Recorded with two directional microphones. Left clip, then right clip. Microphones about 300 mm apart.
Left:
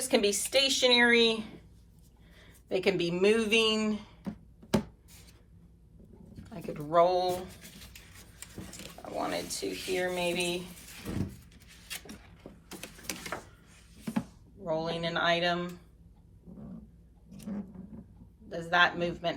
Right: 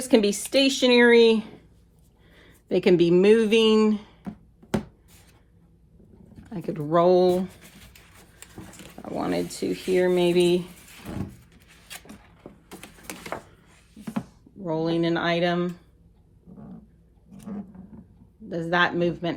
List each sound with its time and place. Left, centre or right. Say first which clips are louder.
0.0 s a woman's voice: right 6 dB; right
6.5 s speech: right 5 dB; right
9.1 s speech: right 6 dB; right
13.1 s a sound: right 4 dB; centre
14.7 s a woman's voice: right 7 dB; right
18.4 s a woman's voice: right 3 dB; right